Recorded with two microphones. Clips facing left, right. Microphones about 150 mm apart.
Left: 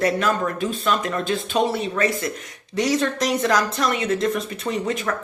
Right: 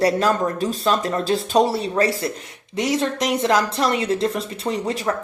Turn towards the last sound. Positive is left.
turn(degrees=-30)  # may be behind; listen again after turning